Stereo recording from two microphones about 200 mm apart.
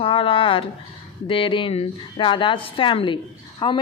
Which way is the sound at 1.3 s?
25° left (ahead or behind).